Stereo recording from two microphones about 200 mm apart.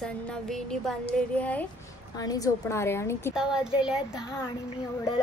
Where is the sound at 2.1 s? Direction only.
20° left (ahead or behind).